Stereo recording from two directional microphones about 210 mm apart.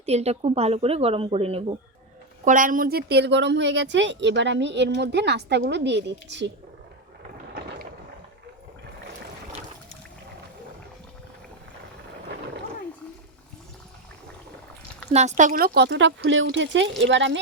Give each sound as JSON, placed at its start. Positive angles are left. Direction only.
{"t": 0.0, "sound": "a woman's voice", "side_deg": -30}
{"t": 2.4, "sound": "a woman's voice", "side_deg": -40}
{"t": 15.1, "sound": "a woman's voice", "side_deg": -30}